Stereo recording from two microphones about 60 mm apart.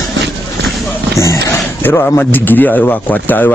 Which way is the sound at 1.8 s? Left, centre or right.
Left.